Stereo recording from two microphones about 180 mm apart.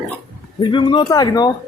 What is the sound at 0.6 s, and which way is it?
Speech, 25° left (ahead or behind).